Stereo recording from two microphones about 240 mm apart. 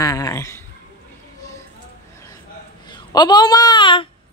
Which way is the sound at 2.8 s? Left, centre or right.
Centre.